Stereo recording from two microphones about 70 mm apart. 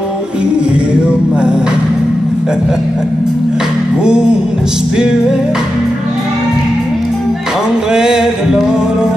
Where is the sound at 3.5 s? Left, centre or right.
Centre.